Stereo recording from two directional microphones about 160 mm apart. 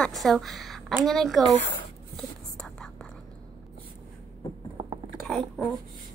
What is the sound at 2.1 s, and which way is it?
Whispering, 5° left (ahead or behind).